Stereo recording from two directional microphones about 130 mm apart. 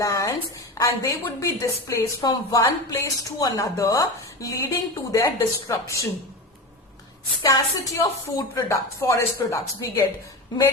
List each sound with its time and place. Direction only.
0.0 s a woman's voice: 25° left (ahead or behind)
7.4 s speech: 25° left (ahead or behind)